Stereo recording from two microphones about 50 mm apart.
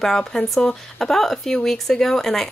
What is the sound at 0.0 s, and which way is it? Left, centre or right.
Speech, centre.